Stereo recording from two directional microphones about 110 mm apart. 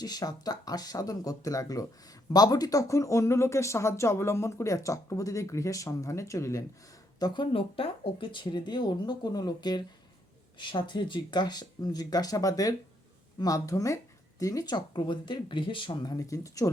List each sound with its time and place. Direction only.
0.0 s speech: 35° left (ahead or behind)
7.2 s speech: 40° left (ahead or behind)
7.5 s speech: 60° left (ahead or behind)
16.1 s speech: 30° left (ahead or behind)